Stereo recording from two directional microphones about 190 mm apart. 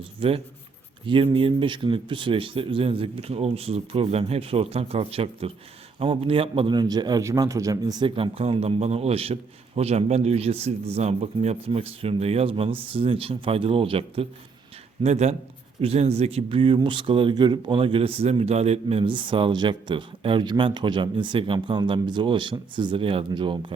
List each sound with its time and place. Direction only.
0.2 s a man's voice: 30° right (ahead or behind)